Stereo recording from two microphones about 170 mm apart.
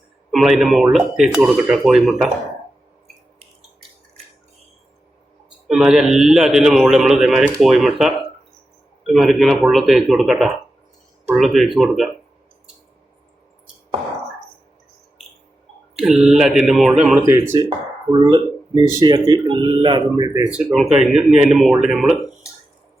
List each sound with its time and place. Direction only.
0.3 s a man's voice: centre (ahead or behind)
5.6 s a man's voice: 5° right (ahead or behind)
16.0 s a man's voice: 5° right (ahead or behind)
17.2 s speech: 15° right (ahead or behind)
18.1 s speech: 30° right (ahead or behind)
20.5 s a man's voice: centre (ahead or behind)